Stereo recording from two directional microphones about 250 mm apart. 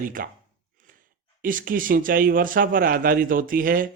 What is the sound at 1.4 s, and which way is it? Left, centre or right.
Speech, right.